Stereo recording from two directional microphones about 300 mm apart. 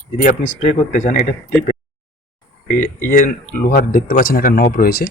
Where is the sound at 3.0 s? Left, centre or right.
Left.